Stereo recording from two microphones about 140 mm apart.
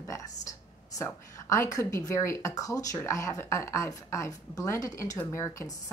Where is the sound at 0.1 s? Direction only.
25° left (ahead or behind).